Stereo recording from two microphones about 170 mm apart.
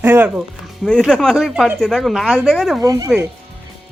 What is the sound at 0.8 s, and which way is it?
A woman's voice, 5° left (ahead or behind).